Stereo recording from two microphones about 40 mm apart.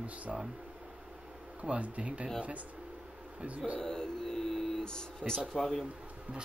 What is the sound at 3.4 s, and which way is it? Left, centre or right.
Speech, right.